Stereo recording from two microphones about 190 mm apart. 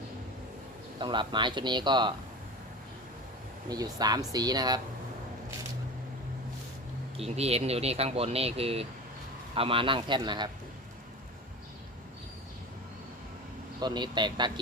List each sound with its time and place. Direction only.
0.9 s speech: 25° right (ahead or behind)
3.7 s speech: 20° right (ahead or behind)
7.2 s speech: 35° right (ahead or behind)
13.7 s speech: 20° right (ahead or behind)